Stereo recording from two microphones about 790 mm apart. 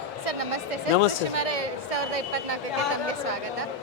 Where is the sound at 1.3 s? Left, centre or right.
Right.